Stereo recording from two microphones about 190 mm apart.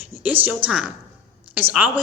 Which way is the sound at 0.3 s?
10° right (ahead or behind).